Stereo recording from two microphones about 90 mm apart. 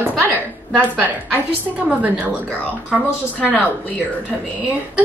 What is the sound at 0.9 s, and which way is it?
A woman's voice, 20° right (ahead or behind).